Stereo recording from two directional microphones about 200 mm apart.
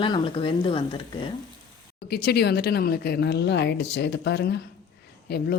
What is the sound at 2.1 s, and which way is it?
A woman's voice, 55° left (ahead or behind).